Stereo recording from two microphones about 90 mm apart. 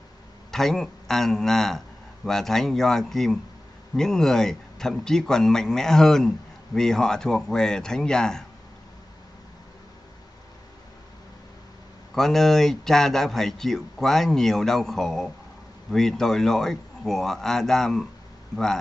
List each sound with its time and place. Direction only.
0.5 s speech: 5° left (ahead or behind)
12.1 s speech: 5° left (ahead or behind)